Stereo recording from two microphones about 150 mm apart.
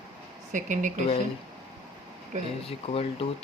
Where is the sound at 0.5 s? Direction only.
60° right (ahead or behind).